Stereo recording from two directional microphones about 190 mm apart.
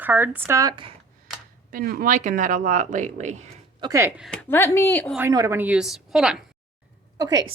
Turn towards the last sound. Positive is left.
turn(degrees=-20)  # may be behind; listen again after turning